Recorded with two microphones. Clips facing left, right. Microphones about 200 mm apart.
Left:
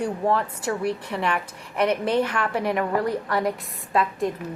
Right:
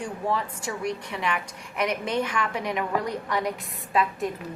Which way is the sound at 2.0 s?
55° left (ahead or behind).